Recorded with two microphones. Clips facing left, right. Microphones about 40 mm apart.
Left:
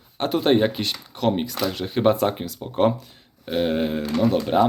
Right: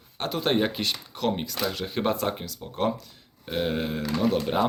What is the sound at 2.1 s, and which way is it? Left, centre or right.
Speech, centre.